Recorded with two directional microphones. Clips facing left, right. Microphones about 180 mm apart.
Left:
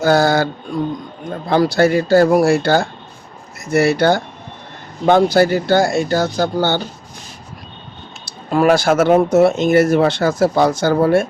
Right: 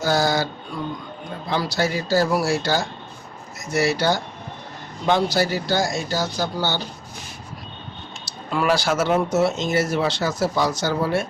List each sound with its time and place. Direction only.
0.0 s speech: 60° left (ahead or behind)
8.2 s speech: 45° left (ahead or behind)